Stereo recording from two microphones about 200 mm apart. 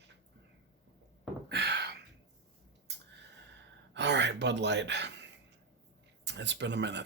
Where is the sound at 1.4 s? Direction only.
55° right (ahead or behind).